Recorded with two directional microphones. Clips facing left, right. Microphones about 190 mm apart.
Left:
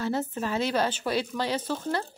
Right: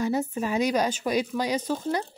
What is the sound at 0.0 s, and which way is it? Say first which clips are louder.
Speech: right 3 dB; 15° right (ahead or behind).